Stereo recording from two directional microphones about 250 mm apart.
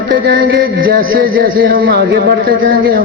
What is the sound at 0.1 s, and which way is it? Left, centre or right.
A man's voice, right.